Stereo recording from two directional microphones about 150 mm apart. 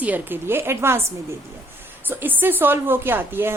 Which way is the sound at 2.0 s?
15° right (ahead or behind).